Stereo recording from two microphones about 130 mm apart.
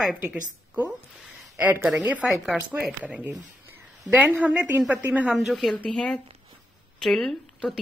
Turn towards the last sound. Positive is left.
turn(degrees=0)  # may be behind; listen again after turning